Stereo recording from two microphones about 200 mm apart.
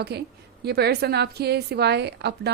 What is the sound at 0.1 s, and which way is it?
A woman's voice, 55° right (ahead or behind).